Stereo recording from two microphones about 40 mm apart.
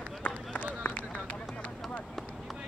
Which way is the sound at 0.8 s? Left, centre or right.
Left.